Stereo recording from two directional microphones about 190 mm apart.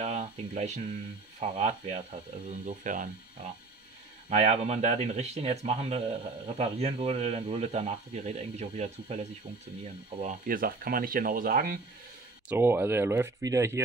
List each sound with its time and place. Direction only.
0.0 s speech: 35° right (ahead or behind)
4.3 s speech: 35° right (ahead or behind)
10.2 s speech: 45° right (ahead or behind)
12.4 s speech: 10° right (ahead or behind)